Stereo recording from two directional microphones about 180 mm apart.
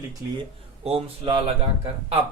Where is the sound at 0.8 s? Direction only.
35° right (ahead or behind).